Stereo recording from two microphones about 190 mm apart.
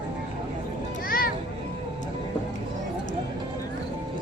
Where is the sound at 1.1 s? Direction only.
50° left (ahead or behind).